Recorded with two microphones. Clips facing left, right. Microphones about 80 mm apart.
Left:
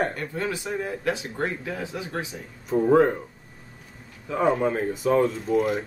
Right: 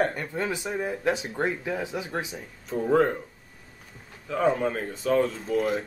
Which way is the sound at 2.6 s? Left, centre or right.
Centre.